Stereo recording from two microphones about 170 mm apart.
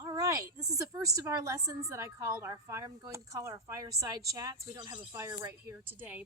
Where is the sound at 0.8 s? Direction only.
20° right (ahead or behind).